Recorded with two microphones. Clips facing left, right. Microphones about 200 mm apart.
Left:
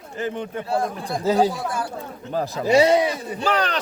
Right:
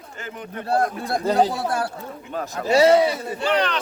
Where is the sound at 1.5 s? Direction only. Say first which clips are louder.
Right 3 dB; 65° right (ahead or behind).